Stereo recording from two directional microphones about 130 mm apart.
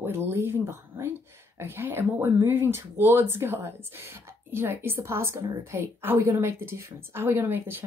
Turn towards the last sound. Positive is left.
turn(degrees=-20)  # may be behind; listen again after turning